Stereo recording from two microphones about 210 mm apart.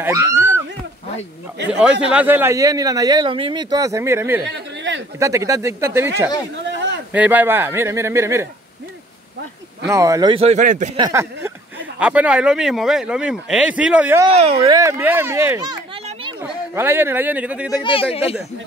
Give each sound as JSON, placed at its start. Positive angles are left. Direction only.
{"t": 0.0, "sound": "a man's voice", "side_deg": -15}
{"t": 1.7, "sound": "a man's voice", "side_deg": -5}
{"t": 6.6, "sound": "a sound", "side_deg": -60}
{"t": 7.1, "sound": "a man's voice", "side_deg": -10}
{"t": 9.8, "sound": "speech", "side_deg": -15}
{"t": 11.0, "sound": "a man's voice", "side_deg": -15}
{"t": 14.3, "sound": "speech", "side_deg": -30}
{"t": 14.8, "sound": "a man's voice", "side_deg": -10}
{"t": 17.8, "sound": "speech", "side_deg": 25}